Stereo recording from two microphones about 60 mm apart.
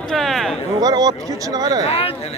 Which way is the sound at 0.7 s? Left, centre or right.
Right.